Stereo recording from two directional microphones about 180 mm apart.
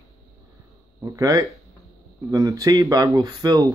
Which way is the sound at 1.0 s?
20° right (ahead or behind).